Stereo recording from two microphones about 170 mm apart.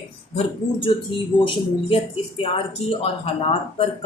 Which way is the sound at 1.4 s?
30° left (ahead or behind).